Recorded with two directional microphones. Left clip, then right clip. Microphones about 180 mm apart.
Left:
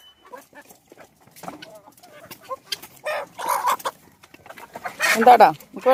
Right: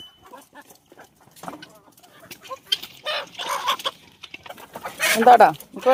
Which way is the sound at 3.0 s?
5° right (ahead or behind).